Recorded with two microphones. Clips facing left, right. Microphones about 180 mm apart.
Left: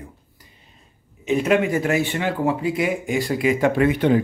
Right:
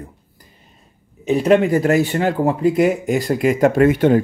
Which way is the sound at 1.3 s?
35° right (ahead or behind).